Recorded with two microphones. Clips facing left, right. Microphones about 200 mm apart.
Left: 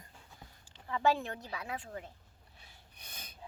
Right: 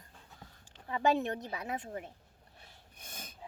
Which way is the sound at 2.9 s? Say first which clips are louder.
Right 4 dB; 50° right (ahead or behind).